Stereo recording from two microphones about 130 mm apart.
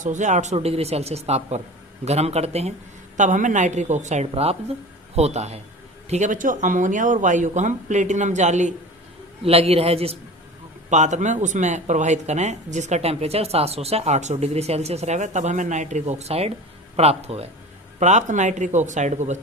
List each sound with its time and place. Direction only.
0.0 s a man's voice: 70° right (ahead or behind); by 2.7 s 55° right (ahead or behind)
3.2 s speech: 75° right (ahead or behind)
4.3 s a man's voice: 50° right (ahead or behind)
6.1 s speech: 65° right (ahead or behind)
9.4 s a man's voice: 50° right (ahead or behind)
10.8 s a man's voice: 65° right (ahead or behind)
18.0 s speech: 65° right (ahead or behind)